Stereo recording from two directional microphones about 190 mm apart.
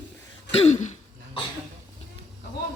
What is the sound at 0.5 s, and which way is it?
Throat clearing, 35° left (ahead or behind).